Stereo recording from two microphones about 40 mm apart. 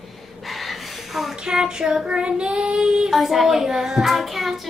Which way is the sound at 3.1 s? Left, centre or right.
Centre.